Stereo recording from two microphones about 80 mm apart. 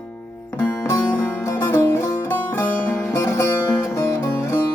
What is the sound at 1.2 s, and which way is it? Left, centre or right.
Music, left.